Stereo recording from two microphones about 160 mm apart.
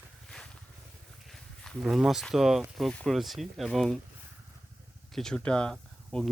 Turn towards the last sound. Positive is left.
turn(degrees=5)  # may be behind; listen again after turning